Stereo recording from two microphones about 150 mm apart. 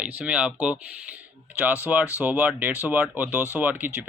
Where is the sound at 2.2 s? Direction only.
10° right (ahead or behind).